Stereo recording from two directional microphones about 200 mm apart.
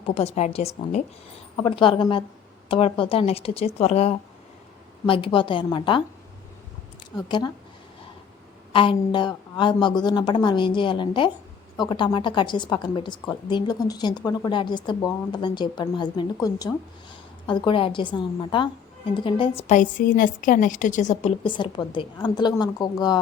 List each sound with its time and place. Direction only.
0.0 s a woman's voice: 30° left (ahead or behind)
7.2 s a woman's voice: 20° left (ahead or behind)
8.7 s a woman's voice: 25° left (ahead or behind)
21.4 s a woman's voice: 25° left (ahead or behind)